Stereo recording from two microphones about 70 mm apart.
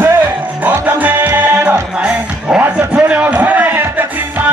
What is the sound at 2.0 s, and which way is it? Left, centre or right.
Music, centre.